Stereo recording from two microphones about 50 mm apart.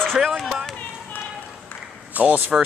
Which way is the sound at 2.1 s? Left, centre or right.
Right.